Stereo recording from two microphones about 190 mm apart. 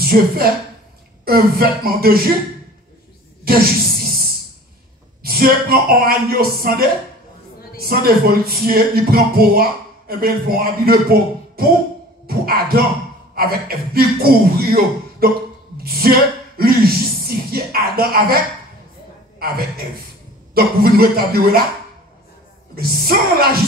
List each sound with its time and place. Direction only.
0.0 s a woman's voice: 50° right (ahead or behind)
3.4 s a sound: 50° right (ahead or behind)
5.2 s speech: 55° right (ahead or behind)
12.3 s a sound: 50° right (ahead or behind)
13.3 s speech: 55° right (ahead or behind)
20.5 s speech: 50° right (ahead or behind)
22.8 s speech: 50° right (ahead or behind)